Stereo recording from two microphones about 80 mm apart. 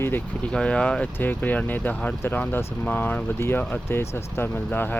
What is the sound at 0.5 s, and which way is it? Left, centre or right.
Speech, centre.